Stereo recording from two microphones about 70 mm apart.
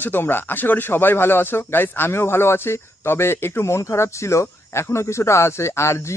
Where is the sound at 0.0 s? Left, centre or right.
Left.